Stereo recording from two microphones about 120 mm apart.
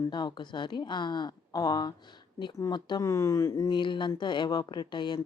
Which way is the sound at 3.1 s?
25° left (ahead or behind).